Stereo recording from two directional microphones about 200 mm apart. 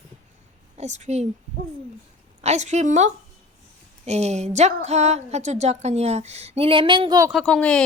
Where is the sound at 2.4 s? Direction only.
35° right (ahead or behind).